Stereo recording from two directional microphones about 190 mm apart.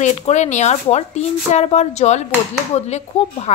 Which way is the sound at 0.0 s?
40° left (ahead or behind).